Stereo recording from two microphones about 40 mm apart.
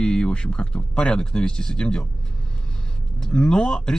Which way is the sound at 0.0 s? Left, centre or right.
Left.